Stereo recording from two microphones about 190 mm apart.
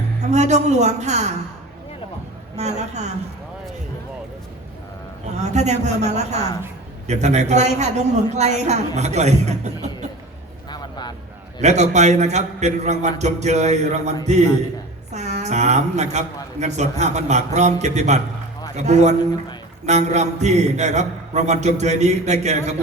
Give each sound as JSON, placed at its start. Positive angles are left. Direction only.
{"t": 0.2, "sound": "a man's voice", "side_deg": -35}
{"t": 2.6, "sound": "a man's voice", "side_deg": -35}
{"t": 5.4, "sound": "a man's voice", "side_deg": -35}
{"t": 10.7, "sound": "a sound", "side_deg": 20}
{"t": 11.6, "sound": "a man's voice", "side_deg": -35}